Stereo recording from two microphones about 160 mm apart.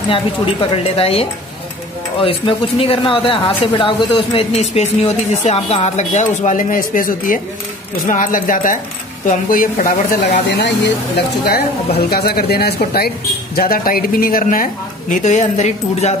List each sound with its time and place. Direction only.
0.1 s speech: 35° left (ahead or behind); by 10.9 s 90° left
12.1 s speech: 75° left (ahead or behind)
13.6 s speech: 65° left (ahead or behind); by 16.2 s 45° left (ahead or behind)